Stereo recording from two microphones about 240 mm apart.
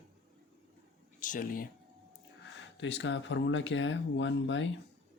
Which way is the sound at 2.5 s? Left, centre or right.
Left.